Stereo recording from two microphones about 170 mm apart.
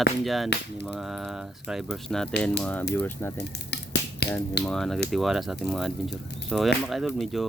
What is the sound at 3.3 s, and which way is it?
Frying, 80° left.